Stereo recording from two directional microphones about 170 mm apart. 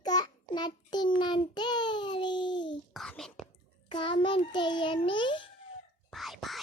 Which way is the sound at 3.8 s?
30° left (ahead or behind).